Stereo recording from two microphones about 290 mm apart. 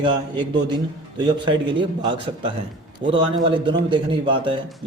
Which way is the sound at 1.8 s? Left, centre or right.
Centre.